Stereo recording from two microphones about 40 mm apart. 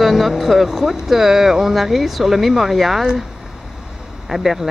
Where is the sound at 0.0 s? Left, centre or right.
Centre.